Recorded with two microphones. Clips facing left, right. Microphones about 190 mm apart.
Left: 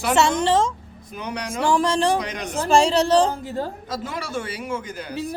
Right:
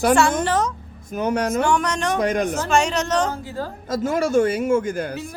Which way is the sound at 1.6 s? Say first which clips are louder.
Left 2 dB; 30° left (ahead or behind).